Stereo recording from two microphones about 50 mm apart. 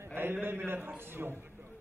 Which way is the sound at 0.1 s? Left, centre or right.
Right.